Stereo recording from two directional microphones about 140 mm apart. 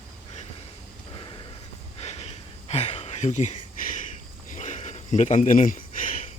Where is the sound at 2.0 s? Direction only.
50° left (ahead or behind); by 6.1 s 70° left (ahead or behind).